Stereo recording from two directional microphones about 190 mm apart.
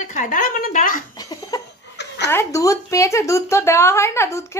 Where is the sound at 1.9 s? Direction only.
65° left (ahead or behind).